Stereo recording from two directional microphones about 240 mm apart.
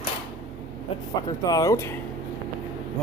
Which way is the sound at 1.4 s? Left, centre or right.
Centre.